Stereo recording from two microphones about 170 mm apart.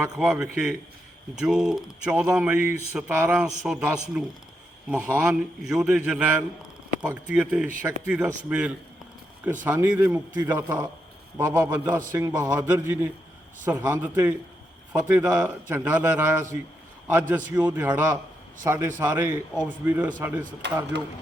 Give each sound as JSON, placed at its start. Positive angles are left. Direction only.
{"t": 0.0, "sound": "a man's voice", "side_deg": -5}
{"t": 20.6, "sound": "speech", "side_deg": -90}